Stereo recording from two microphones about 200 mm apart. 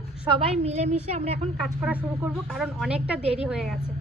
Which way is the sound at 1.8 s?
5° right (ahead or behind).